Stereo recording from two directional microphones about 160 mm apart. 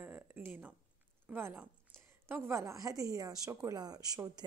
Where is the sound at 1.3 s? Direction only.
10° right (ahead or behind).